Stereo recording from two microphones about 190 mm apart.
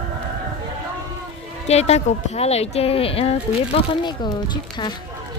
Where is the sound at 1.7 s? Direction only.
35° left (ahead or behind).